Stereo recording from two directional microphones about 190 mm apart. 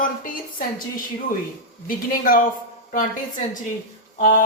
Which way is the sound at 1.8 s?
45° left (ahead or behind).